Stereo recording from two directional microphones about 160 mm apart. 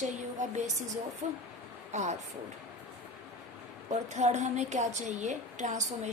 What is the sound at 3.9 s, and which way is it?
A woman's voice, 45° right (ahead or behind).